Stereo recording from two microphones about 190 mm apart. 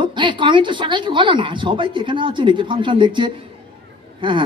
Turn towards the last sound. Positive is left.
turn(degrees=-25)  # may be behind; listen again after turning